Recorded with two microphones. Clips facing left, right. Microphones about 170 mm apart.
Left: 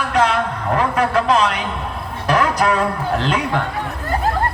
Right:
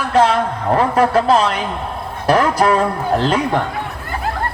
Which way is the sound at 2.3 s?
35° right (ahead or behind).